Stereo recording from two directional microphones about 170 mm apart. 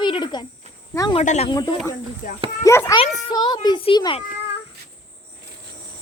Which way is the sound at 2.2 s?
50° left (ahead or behind).